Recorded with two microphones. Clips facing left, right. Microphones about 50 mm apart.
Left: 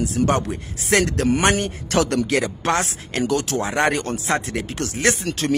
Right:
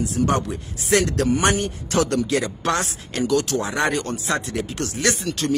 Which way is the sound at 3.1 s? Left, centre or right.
Left.